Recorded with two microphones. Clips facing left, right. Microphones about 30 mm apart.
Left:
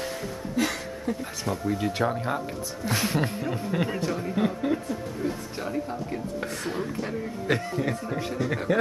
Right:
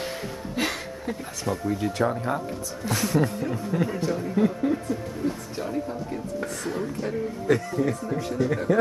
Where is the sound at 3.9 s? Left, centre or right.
Centre.